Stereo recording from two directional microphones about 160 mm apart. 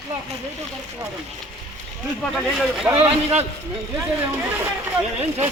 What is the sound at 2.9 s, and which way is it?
Speech, 40° right (ahead or behind).